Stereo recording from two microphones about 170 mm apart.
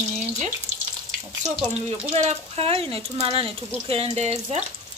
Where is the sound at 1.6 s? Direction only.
35° right (ahead or behind).